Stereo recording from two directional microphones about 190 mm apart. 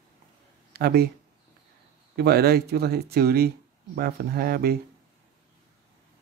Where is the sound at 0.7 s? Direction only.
55° right (ahead or behind).